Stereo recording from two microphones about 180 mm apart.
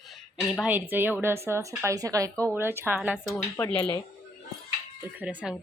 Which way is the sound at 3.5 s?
15° left (ahead or behind).